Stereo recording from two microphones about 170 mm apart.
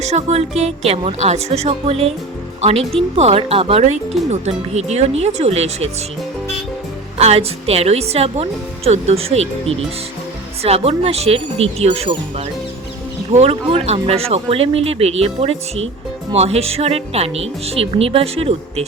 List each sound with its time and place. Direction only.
0.0 s speech: 40° right (ahead or behind)
3.2 s speech: 35° right (ahead or behind)
7.2 s speech: 40° right (ahead or behind)
13.3 s speech: 35° right (ahead or behind)